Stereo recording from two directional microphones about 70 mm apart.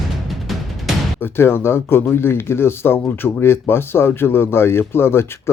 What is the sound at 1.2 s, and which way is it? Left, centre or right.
Speech, left.